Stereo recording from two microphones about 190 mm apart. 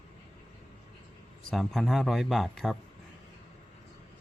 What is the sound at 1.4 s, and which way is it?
A man's voice, centre (ahead or behind).